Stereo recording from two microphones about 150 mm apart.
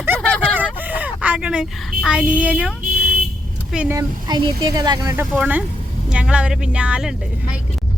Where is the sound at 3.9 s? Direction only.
25° right (ahead or behind).